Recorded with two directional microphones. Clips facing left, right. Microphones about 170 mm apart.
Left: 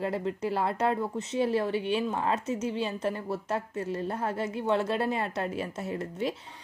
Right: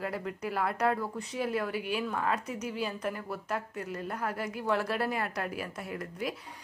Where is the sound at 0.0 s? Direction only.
25° left (ahead or behind).